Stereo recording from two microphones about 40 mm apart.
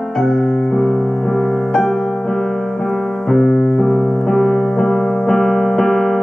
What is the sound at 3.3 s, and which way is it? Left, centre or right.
Keyboard, centre.